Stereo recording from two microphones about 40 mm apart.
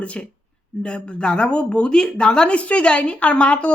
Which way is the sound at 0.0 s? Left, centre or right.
Left.